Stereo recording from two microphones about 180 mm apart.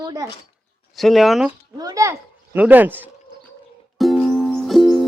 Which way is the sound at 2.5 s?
10° right (ahead or behind).